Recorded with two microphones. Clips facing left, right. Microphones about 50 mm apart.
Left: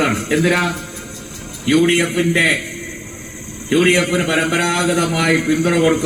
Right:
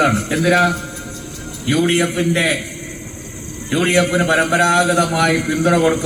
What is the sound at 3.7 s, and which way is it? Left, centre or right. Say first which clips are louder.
A man's voice: left 1 dB; left.